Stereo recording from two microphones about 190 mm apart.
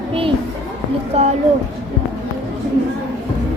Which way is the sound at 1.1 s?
35° right (ahead or behind).